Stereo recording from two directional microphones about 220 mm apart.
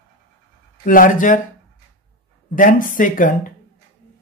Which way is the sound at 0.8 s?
40° left (ahead or behind).